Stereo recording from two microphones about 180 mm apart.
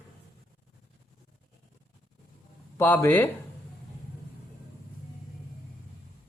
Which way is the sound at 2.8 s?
10° left (ahead or behind).